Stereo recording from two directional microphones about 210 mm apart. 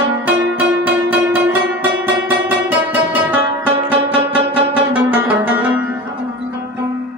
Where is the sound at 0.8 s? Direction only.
5° right (ahead or behind).